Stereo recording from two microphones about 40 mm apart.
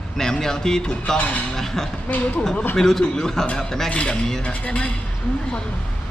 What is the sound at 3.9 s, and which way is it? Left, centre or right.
Speech, left.